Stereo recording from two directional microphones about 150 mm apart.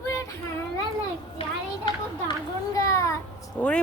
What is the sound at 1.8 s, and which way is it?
Children playing, 25° left (ahead or behind).